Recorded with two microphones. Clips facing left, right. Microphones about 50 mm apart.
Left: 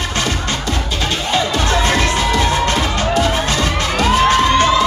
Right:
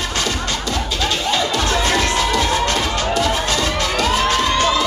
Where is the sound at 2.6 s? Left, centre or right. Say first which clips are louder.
Left 2 dB; left.